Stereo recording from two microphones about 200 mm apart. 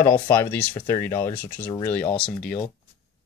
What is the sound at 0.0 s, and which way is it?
Speech, 10° left (ahead or behind).